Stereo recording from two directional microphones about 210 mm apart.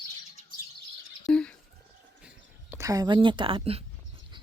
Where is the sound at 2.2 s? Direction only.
10° right (ahead or behind).